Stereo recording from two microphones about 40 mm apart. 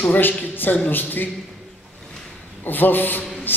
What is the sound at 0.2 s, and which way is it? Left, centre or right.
A man's voice, left.